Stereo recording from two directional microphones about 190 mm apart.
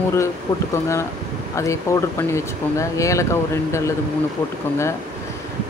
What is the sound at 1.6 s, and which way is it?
Speech, 15° left (ahead or behind).